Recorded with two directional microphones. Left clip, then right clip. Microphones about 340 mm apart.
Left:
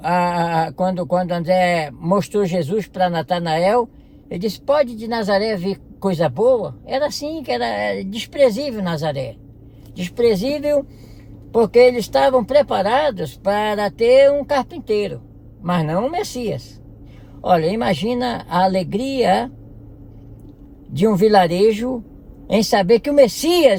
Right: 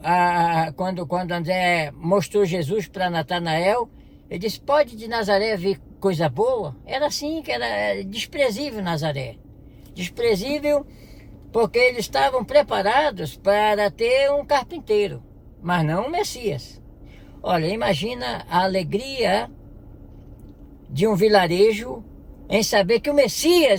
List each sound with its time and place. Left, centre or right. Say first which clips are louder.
0.0 s speech: even; centre
20.9 s speech: left 3 dB; centre